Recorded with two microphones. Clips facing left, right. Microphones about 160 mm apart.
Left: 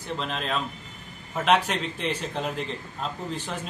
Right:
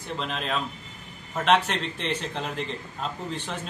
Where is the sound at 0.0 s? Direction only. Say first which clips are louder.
Left 1 dB; centre (ahead or behind).